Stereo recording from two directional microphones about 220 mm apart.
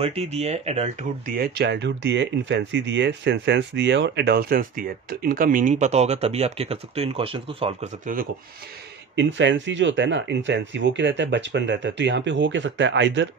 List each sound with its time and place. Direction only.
0.0 s speech: 25° right (ahead or behind)
1.3 s speech: 45° right (ahead or behind)
9.1 s speech: 55° right (ahead or behind)